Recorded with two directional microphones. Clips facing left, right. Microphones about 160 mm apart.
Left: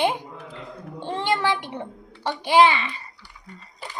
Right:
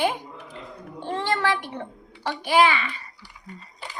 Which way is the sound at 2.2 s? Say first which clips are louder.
Left 3 dB; 25° left (ahead or behind).